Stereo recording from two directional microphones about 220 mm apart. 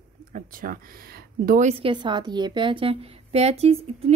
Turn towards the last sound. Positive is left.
turn(degrees=-30)  # may be behind; listen again after turning